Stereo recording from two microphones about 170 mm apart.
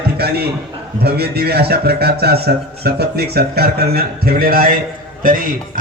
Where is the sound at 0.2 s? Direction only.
70° right (ahead or behind).